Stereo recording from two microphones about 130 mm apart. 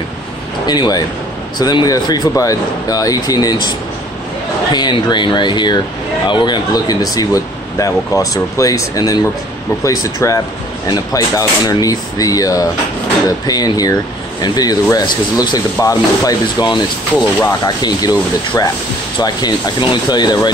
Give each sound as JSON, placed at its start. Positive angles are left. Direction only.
{"t": 0.7, "sound": "speech", "side_deg": 30}
{"t": 4.7, "sound": "speech", "side_deg": 35}
{"t": 10.2, "sound": "speech", "side_deg": 20}